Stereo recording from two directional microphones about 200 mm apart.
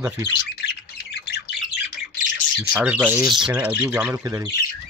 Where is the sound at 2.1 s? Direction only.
40° left (ahead or behind).